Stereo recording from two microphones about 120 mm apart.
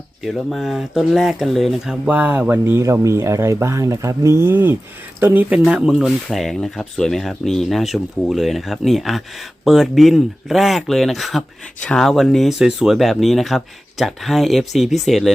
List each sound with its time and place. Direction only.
0.2 s speech: centre (ahead or behind)